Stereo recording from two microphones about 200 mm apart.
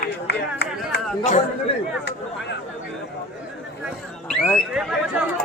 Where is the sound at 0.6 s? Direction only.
60° left (ahead or behind).